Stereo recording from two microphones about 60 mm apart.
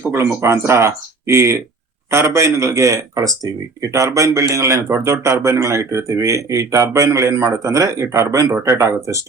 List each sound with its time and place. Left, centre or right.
0.1 s speech: right
4.5 s speech: right